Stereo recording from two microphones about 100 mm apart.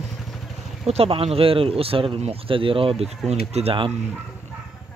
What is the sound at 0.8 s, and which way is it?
Speech, 80° right.